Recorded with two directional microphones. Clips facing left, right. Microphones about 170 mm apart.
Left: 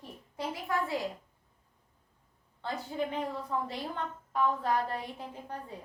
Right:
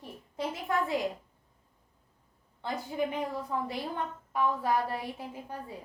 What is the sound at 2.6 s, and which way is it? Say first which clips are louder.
A woman's voice: right 2 dB; 15° right (ahead or behind).